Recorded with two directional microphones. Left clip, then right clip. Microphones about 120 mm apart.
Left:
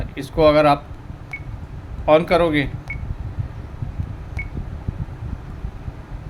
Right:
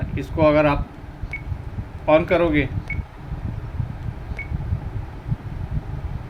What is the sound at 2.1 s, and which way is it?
Speech, 65° left (ahead or behind).